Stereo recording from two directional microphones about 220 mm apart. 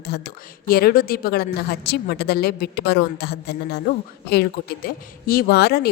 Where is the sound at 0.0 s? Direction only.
45° left (ahead or behind).